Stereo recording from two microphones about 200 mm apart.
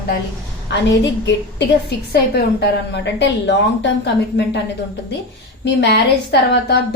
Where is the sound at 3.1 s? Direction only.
60° left (ahead or behind).